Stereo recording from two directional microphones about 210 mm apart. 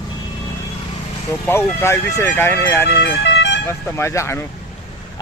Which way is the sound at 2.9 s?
55° left (ahead or behind).